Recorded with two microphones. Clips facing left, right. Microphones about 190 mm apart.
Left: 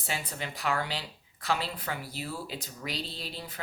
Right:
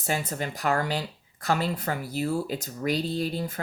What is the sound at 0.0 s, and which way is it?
Speech, 45° right (ahead or behind).